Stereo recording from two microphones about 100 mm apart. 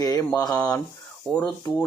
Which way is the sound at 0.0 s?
35° left (ahead or behind).